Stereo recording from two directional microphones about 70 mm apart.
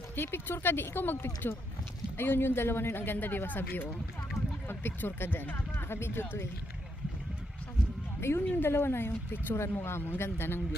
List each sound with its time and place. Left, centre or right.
0.2 s speech: left
8.2 s speech: left